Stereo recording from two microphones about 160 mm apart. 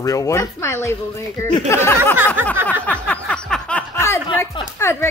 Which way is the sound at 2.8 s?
10° left (ahead or behind).